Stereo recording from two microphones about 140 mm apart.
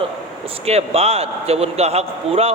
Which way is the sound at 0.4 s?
45° right (ahead or behind).